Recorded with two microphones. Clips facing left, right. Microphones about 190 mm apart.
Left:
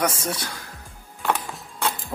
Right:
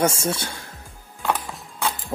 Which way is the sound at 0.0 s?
25° right (ahead or behind).